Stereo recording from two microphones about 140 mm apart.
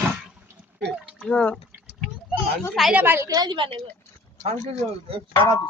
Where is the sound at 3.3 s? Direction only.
30° right (ahead or behind).